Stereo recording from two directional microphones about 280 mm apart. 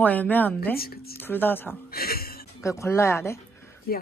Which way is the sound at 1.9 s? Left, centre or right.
Left.